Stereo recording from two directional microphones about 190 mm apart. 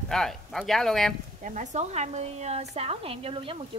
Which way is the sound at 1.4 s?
40° right (ahead or behind).